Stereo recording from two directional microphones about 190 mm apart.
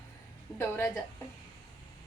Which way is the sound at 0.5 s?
15° left (ahead or behind).